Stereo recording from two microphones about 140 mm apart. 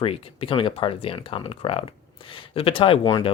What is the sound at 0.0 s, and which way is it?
Speech, 40° left (ahead or behind).